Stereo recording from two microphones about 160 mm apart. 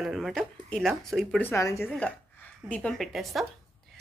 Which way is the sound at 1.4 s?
15° left (ahead or behind).